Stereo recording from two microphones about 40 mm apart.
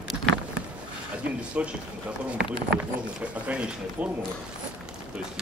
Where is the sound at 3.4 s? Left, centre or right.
Right.